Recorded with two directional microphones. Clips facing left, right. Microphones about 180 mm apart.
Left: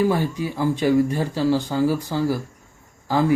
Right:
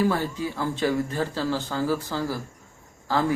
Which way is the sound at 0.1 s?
15° left (ahead or behind).